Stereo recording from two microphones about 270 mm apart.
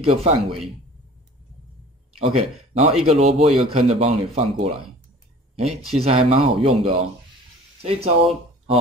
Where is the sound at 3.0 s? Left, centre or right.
Right.